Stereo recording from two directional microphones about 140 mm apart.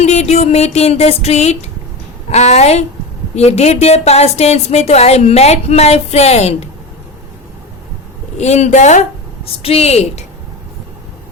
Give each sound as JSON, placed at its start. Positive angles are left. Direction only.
{"t": 0.0, "sound": "a sound", "side_deg": 50}
{"t": 2.3, "sound": "a woman's voice", "side_deg": 50}
{"t": 8.4, "sound": "a woman's voice", "side_deg": 50}